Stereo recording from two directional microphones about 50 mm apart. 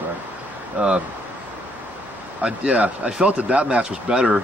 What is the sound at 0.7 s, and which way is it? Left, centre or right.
Speech, right.